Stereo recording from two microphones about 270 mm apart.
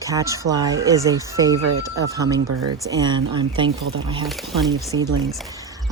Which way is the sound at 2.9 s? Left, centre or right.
Centre.